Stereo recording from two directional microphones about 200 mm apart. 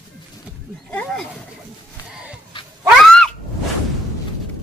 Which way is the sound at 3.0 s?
5° left (ahead or behind).